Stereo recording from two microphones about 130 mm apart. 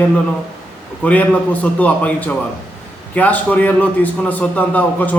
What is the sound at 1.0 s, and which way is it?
A man's voice, 10° left (ahead or behind).